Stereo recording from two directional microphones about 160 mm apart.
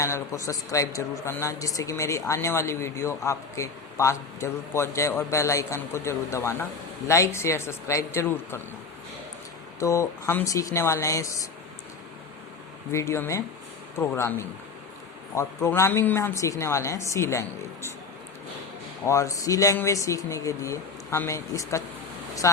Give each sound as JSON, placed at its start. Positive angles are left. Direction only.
{"t": 0.0, "sound": "a woman's voice", "side_deg": 20}
{"t": 9.8, "sound": "speech", "side_deg": 20}
{"t": 12.9, "sound": "a woman's voice", "side_deg": 15}
{"t": 19.0, "sound": "speech", "side_deg": 20}